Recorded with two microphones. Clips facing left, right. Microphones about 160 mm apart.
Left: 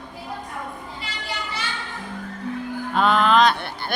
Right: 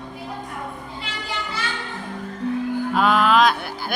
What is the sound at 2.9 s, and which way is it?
A woman's voice, 5° right (ahead or behind).